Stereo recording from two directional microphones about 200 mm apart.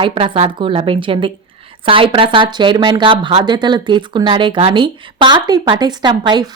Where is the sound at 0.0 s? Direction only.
25° right (ahead or behind).